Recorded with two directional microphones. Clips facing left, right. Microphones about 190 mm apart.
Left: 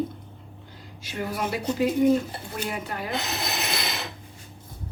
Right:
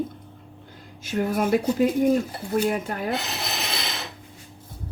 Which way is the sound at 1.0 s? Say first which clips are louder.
Right 6 dB; 50° right (ahead or behind).